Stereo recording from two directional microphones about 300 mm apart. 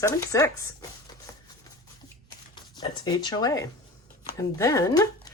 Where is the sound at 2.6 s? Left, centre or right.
Centre.